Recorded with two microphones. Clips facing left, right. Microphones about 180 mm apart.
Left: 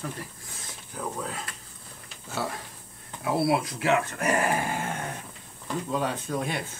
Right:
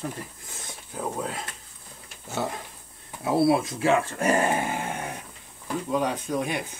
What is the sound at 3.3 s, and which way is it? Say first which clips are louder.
Speech: right 4 dB; 25° right (ahead or behind).